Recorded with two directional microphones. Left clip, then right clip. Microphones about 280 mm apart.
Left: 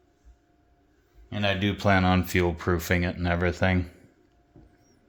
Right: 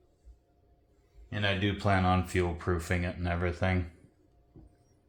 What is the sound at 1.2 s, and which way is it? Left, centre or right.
Speech, left.